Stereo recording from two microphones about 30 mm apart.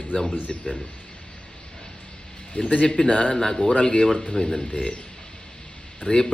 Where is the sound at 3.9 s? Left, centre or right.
Left.